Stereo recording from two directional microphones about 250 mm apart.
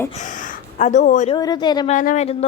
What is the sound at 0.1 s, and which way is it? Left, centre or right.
Speech, left.